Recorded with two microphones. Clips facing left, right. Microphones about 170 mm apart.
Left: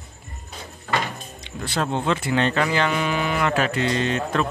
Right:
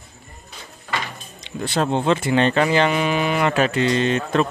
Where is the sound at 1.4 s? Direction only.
25° right (ahead or behind).